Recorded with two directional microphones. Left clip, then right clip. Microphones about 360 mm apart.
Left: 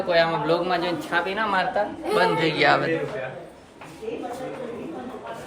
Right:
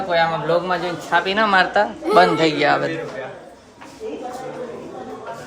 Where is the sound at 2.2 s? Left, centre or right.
Centre.